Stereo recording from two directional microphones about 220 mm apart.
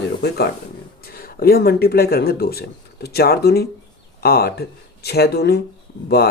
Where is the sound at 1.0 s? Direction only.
45° left (ahead or behind).